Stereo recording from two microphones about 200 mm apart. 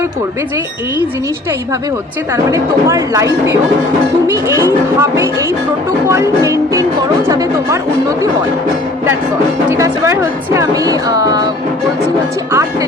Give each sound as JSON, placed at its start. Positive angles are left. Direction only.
{"t": 2.3, "sound": "speech", "side_deg": -15}
{"t": 9.7, "sound": "speech", "side_deg": -15}